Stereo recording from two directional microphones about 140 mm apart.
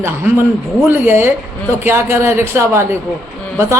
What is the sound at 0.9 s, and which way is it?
A man's voice, 15° right (ahead or behind).